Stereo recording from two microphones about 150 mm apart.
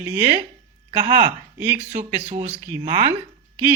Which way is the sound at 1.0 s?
40° right (ahead or behind).